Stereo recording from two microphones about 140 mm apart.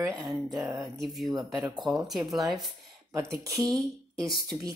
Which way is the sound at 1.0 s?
Centre (ahead or behind).